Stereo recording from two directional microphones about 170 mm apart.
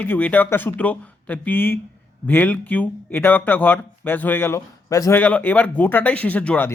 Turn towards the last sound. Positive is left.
turn(degrees=10)  # may be behind; listen again after turning